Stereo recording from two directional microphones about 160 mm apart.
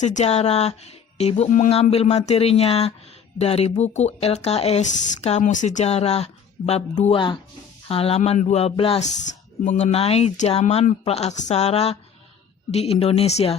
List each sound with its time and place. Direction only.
0.0 s speech: 50° left (ahead or behind)